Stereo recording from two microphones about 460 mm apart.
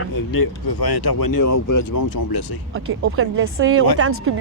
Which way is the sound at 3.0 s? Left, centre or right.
Right.